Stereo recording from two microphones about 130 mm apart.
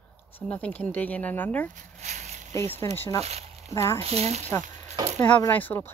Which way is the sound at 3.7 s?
20° left (ahead or behind).